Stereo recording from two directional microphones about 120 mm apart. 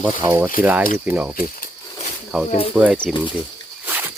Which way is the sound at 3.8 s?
15° right (ahead or behind).